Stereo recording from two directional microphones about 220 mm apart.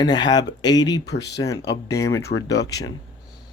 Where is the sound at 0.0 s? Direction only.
20° left (ahead or behind).